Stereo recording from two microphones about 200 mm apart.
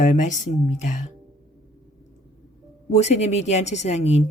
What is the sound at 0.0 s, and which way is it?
A woman's voice, 40° left (ahead or behind).